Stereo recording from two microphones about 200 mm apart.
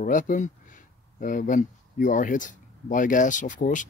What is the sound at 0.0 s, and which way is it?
Speech, 40° left (ahead or behind).